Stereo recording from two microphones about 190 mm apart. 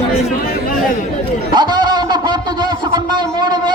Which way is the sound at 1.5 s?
20° right (ahead or behind).